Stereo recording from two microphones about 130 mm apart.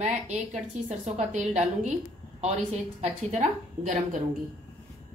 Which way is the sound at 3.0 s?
55° right (ahead or behind).